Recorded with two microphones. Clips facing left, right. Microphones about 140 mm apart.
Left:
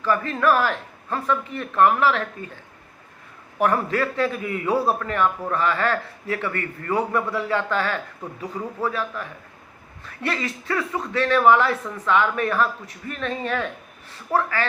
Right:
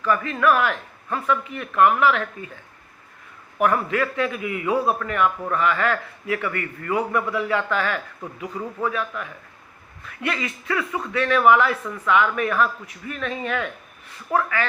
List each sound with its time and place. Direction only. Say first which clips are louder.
0.0 s a man's voice: even; 35° left (ahead or behind)
3.6 s a man's voice: even; 35° left (ahead or behind)